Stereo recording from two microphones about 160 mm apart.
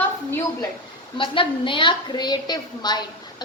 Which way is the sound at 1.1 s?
30° left (ahead or behind).